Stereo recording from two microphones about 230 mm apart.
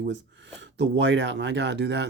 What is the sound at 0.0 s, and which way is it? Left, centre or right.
Speech, right.